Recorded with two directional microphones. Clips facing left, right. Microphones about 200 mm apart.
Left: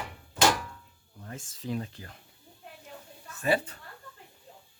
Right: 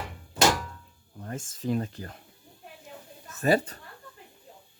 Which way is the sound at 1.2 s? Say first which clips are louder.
Right 6 dB; 50° right (ahead or behind).